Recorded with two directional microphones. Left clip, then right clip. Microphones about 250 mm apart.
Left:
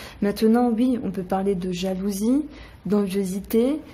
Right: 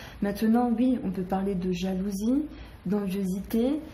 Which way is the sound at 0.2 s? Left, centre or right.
Left.